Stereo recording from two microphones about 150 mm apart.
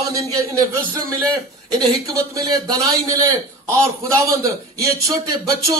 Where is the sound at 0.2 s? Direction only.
20° right (ahead or behind).